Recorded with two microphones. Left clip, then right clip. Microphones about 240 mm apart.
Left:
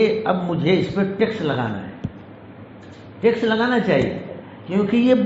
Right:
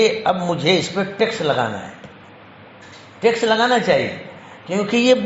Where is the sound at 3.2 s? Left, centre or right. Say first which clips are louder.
Right 3 dB; right.